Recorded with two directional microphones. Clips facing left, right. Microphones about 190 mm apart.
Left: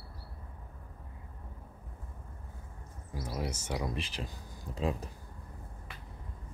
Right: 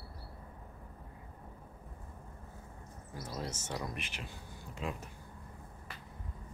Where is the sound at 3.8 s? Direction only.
30° left (ahead or behind).